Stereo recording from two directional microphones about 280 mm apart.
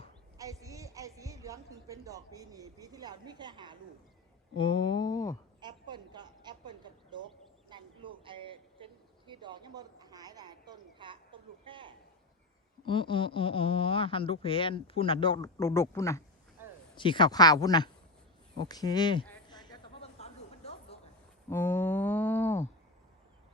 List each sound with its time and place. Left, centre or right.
0.3 s a woman's voice: centre
4.5 s speech: centre
5.5 s a woman's voice: centre
12.8 s speech: centre
18.6 s a sound: centre
21.5 s a sound: centre